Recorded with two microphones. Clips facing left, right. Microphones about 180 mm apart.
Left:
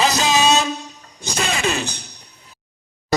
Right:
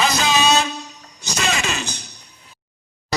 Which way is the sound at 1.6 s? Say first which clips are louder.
Left 4 dB; 55° left (ahead or behind).